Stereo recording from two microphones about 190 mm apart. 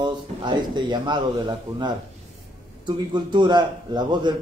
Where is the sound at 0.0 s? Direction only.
25° right (ahead or behind).